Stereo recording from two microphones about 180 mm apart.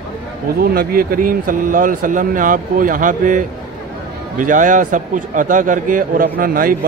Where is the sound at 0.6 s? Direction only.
55° right (ahead or behind).